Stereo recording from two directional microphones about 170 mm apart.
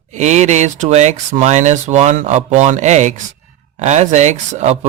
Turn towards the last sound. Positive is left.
turn(degrees=-40)  # may be behind; listen again after turning